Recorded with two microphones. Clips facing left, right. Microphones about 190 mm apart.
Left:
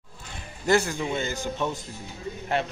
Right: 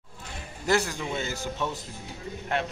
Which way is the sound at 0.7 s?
Centre (ahead or behind).